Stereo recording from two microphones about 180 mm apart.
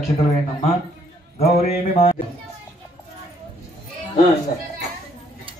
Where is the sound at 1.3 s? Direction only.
35° left (ahead or behind).